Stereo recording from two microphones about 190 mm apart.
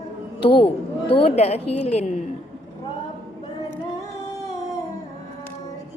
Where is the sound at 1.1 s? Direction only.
30° left (ahead or behind).